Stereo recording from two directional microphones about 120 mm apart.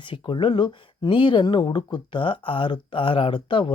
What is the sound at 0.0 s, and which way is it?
Speech, 40° left (ahead or behind).